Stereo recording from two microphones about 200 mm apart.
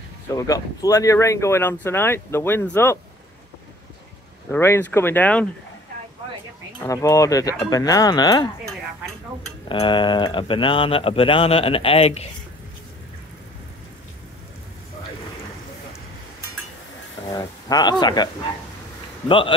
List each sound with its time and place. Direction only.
0.4 s speech: 15° left (ahead or behind)
4.5 s speech: 10° left (ahead or behind)
6.8 s speech: 15° left (ahead or behind)
9.7 s speech: 25° left (ahead or behind)
17.3 s speech: 20° left (ahead or behind)